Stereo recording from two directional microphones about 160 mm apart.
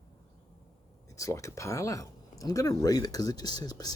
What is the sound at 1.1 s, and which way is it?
Speech, 20° left (ahead or behind).